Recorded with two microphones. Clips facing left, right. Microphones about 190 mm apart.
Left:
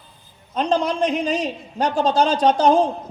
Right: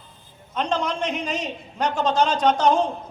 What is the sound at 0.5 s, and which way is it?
A man's voice, 35° left (ahead or behind).